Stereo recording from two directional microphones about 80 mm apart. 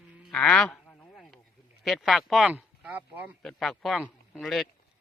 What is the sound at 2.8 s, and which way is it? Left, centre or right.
Speech, centre.